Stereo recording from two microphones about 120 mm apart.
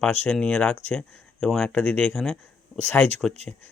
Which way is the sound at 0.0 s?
5° left (ahead or behind).